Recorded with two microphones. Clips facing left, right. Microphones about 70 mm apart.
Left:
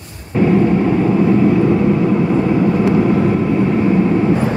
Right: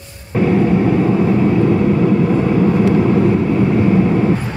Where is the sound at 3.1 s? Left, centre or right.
Left.